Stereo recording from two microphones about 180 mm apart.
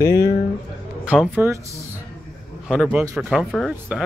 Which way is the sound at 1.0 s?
10° right (ahead or behind).